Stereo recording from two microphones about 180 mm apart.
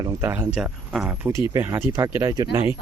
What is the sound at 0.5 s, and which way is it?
Speech, 5° right (ahead or behind).